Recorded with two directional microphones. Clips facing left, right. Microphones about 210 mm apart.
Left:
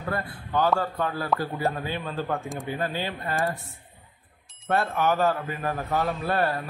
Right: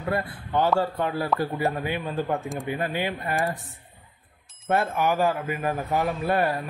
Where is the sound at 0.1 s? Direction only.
25° right (ahead or behind).